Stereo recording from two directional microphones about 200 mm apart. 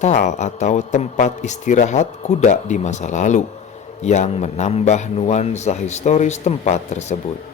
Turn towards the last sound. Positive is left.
turn(degrees=35)  # may be behind; listen again after turning